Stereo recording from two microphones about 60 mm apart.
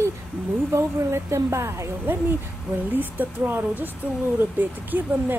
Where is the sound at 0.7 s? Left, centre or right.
Right.